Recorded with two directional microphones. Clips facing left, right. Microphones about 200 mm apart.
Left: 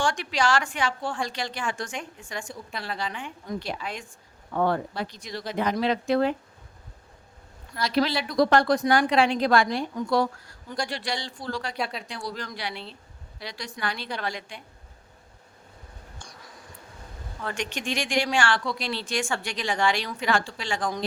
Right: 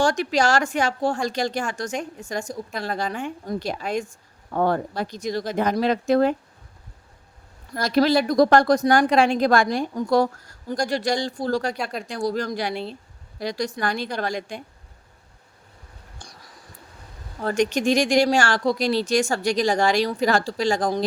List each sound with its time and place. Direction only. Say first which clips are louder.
0.0 s speech: right 5 dB; 40° right (ahead or behind)
7.7 s speech: right 6 dB; 45° right (ahead or behind)
16.2 s a sound: right 3 dB; 35° right (ahead or behind)
17.4 s speech: right 11 dB; 40° right (ahead or behind)